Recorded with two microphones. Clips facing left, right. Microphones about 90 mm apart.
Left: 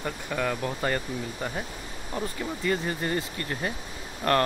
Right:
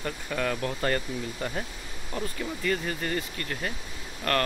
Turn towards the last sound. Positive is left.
turn(degrees=25)  # may be behind; listen again after turning